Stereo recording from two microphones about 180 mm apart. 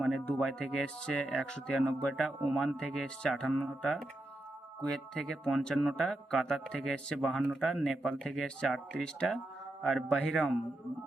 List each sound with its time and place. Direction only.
0.0 s speech: centre (ahead or behind)